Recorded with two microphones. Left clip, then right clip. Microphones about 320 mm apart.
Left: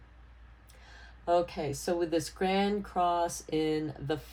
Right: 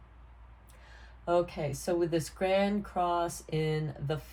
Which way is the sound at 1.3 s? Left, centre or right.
Left.